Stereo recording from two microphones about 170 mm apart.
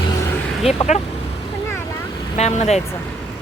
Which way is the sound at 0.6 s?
40° left (ahead or behind).